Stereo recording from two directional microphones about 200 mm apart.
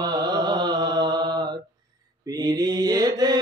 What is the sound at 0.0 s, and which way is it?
Mantra, 20° right (ahead or behind).